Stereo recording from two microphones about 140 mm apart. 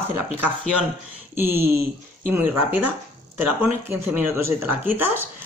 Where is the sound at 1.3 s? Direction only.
15° right (ahead or behind).